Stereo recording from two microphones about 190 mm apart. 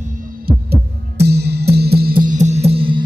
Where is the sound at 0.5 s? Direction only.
55° right (ahead or behind).